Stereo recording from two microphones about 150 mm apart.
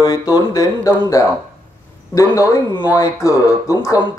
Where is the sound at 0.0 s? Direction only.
25° left (ahead or behind).